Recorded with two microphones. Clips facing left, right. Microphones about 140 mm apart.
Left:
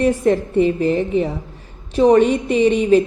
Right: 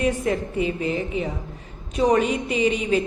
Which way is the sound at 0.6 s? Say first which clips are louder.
Left 10 dB; 40° left (ahead or behind).